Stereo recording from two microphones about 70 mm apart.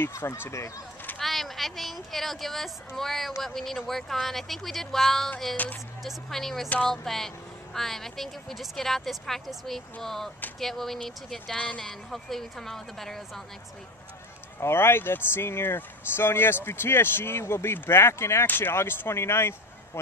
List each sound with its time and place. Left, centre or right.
0.1 s speech: left
1.1 s speech: centre
11.8 s speech: centre
14.6 s speech: left